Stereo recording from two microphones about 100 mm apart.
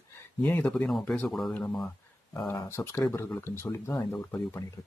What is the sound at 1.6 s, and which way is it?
Speech, 15° left (ahead or behind).